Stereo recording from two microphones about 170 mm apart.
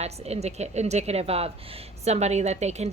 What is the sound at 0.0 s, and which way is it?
A woman's voice, 40° right (ahead or behind).